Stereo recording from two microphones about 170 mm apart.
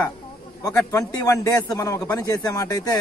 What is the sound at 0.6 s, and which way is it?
A man's voice, 20° left (ahead or behind).